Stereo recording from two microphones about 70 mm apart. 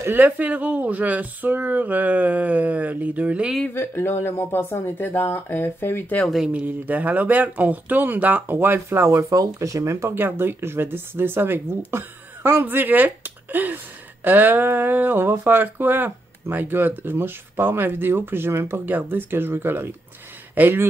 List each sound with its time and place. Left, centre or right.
0.0 s speech: right
3.7 s speech: left
6.2 s speech: centre
6.5 s speech: right
9.1 s speech: right